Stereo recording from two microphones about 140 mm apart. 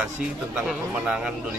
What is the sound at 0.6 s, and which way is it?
Speech, 5° right (ahead or behind).